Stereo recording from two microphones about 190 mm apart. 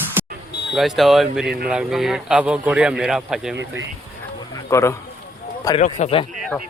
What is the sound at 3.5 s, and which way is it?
Speech, 75° right (ahead or behind).